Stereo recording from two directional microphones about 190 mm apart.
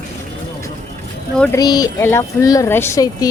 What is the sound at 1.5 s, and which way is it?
Speech, 20° left (ahead or behind).